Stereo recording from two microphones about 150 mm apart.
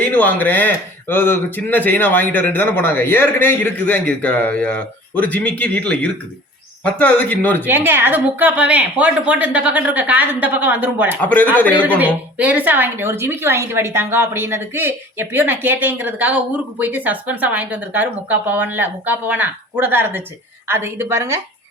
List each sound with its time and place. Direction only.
0.1 s speech: 10° left (ahead or behind)
7.6 s a woman's voice: 15° right (ahead or behind)
11.2 s speech: 10° left (ahead or behind)
11.8 s a woman's voice: 10° right (ahead or behind)